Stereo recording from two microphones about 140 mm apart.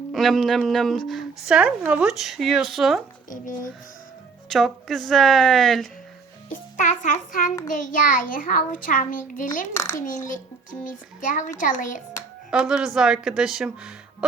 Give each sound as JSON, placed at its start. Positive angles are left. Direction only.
{"t": 0.1, "sound": "speech", "side_deg": 0}
{"t": 3.2, "sound": "a child's voice", "side_deg": 70}
{"t": 4.4, "sound": "speech", "side_deg": 0}
{"t": 6.5, "sound": "a child's voice", "side_deg": 65}
{"t": 9.7, "sound": "a child's voice", "side_deg": 20}
{"t": 10.0, "sound": "a child's voice", "side_deg": 70}
{"t": 12.5, "sound": "speech", "side_deg": -5}